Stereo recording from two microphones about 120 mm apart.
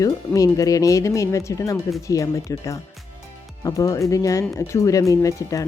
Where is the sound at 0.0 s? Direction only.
30° left (ahead or behind).